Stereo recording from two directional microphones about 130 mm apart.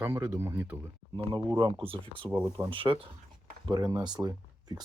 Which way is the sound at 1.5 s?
35° right (ahead or behind).